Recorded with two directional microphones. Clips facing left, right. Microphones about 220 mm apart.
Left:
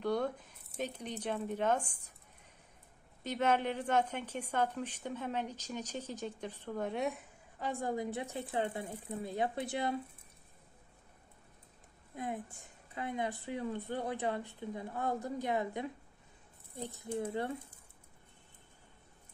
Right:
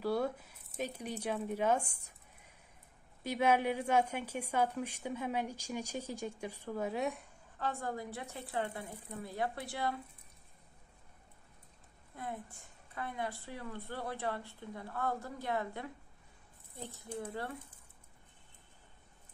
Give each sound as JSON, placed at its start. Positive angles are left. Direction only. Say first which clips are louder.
{"t": 0.0, "sound": "a woman's voice", "louder": "even", "side_deg": -5}
{"t": 3.3, "sound": "a woman's voice", "louder": "right 1 dB", "side_deg": -10}
{"t": 7.5, "sound": "speech", "louder": "left 2 dB", "side_deg": 15}
{"t": 12.1, "sound": "a woman's voice", "louder": "left 4 dB", "side_deg": 15}
{"t": 17.0, "sound": "speech", "louder": "left 5 dB", "side_deg": 20}